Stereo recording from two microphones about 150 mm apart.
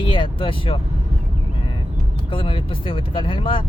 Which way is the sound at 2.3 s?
35° left (ahead or behind).